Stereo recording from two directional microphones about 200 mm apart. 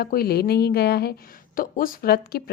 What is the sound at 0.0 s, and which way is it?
A woman's voice, 50° left (ahead or behind).